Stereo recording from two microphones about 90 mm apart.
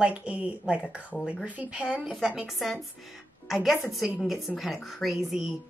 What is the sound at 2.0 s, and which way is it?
Speech, 5° right (ahead or behind).